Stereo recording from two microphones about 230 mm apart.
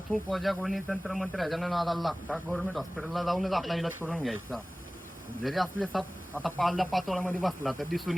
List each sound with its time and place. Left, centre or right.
0.1 s speech: centre